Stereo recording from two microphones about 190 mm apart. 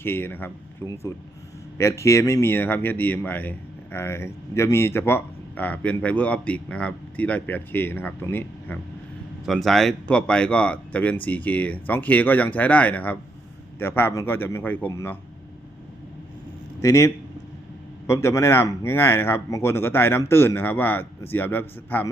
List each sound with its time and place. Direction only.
0.0 s speech: 10° left (ahead or behind)
16.8 s speech: 15° left (ahead or behind)